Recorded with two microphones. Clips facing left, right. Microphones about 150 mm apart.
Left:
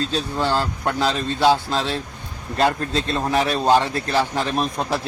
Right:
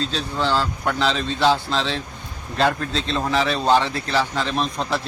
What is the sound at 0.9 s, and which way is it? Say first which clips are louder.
A man's voice: left 1 dB; 10° left (ahead or behind).